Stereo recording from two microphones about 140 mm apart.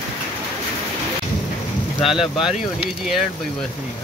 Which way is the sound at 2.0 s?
Centre (ahead or behind).